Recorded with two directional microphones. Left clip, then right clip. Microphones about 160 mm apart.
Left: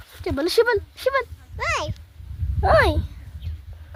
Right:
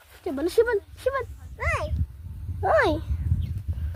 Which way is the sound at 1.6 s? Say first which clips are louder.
Left 3 dB; 60° left (ahead or behind).